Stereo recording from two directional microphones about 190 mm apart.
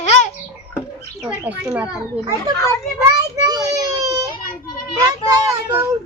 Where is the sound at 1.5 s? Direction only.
5° right (ahead or behind).